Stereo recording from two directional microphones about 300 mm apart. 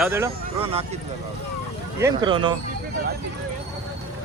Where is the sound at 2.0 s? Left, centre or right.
Centre.